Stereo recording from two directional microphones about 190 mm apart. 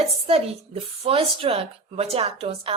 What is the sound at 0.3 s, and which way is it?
Speech, 30° right (ahead or behind).